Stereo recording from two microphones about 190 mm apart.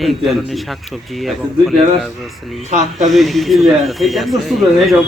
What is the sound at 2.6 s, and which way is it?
Speech, 35° right (ahead or behind).